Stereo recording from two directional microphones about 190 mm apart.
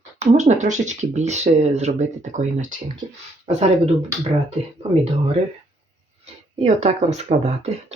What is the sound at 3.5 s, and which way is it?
Speech, 35° right (ahead or behind).